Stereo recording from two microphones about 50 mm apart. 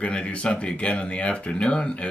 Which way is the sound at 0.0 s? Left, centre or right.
Left.